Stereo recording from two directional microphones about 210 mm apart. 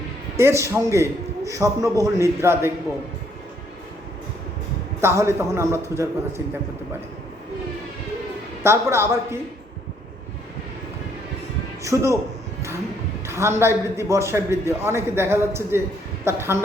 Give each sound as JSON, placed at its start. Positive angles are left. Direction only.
{"t": 0.3, "sound": "a man's voice", "side_deg": -15}
{"t": 4.9, "sound": "a man's voice", "side_deg": -10}
{"t": 8.6, "sound": "a man's voice", "side_deg": -10}
{"t": 11.8, "sound": "a man's voice", "side_deg": -15}
{"t": 13.2, "sound": "a man's voice", "side_deg": -10}